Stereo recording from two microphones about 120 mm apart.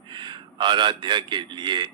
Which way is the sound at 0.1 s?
40° right (ahead or behind).